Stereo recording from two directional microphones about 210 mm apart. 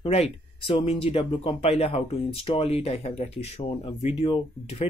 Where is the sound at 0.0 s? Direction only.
25° left (ahead or behind).